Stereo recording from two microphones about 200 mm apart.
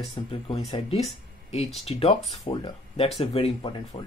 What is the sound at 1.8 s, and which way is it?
Speech, 25° left (ahead or behind).